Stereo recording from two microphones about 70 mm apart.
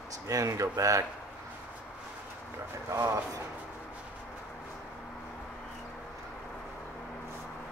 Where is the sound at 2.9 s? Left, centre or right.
Right.